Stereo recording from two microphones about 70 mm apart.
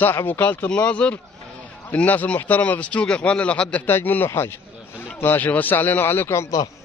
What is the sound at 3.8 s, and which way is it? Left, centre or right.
A man's voice, left.